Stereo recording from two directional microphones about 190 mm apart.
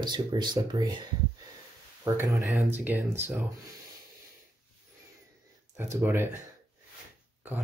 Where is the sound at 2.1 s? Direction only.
15° right (ahead or behind).